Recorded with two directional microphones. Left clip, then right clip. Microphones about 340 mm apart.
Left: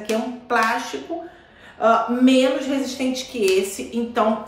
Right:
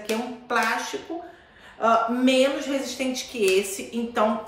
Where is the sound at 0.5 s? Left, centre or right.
Centre.